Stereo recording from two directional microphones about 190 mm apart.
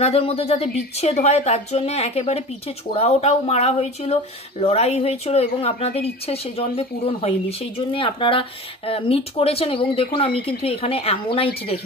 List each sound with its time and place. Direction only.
0.0 s a woman's voice: 30° left (ahead or behind)